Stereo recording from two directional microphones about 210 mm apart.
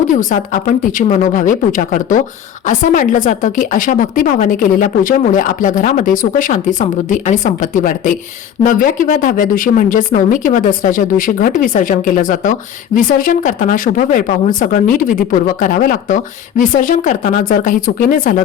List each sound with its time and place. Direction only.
0.1 s a woman's voice: 35° left (ahead or behind)